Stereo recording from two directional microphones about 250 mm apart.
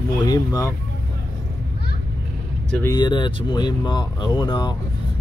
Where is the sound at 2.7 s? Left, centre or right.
Centre.